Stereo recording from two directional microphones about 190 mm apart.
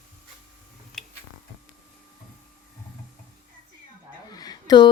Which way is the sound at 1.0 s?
Centre (ahead or behind).